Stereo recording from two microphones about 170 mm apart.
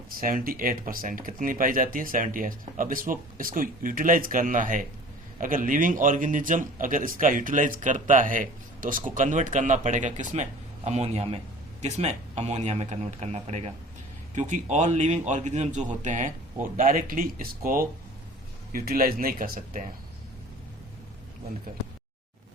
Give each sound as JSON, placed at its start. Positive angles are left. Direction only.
{"t": 0.1, "sound": "a man's voice", "side_deg": -55}